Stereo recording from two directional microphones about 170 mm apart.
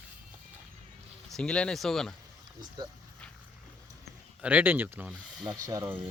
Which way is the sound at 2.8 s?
25° right (ahead or behind).